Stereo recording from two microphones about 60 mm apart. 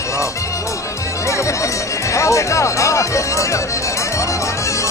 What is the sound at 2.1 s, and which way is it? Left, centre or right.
Speech, left.